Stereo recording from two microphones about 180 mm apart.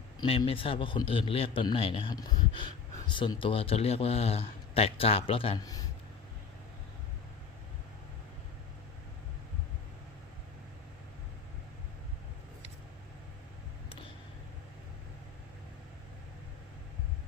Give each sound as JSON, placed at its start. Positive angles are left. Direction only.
{"t": 0.2, "sound": "a man's voice", "side_deg": 30}